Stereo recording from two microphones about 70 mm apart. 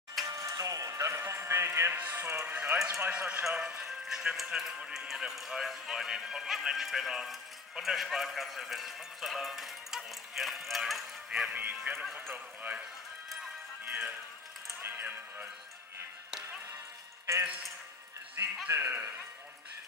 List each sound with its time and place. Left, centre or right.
0.3 s music: right
2.0 s a man's voice: right; by 3.4 s centre
3.5 s music: right
4.1 s a man's voice: centre
11.2 s speech: centre
11.5 s speech: right
13.8 s speech: right
14.8 s music: right
18.4 s speech: right